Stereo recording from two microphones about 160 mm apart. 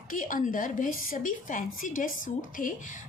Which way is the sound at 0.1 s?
55° left (ahead or behind).